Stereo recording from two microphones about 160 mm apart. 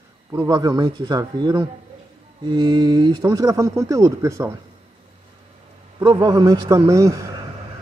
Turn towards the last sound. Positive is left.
turn(degrees=-20)  # may be behind; listen again after turning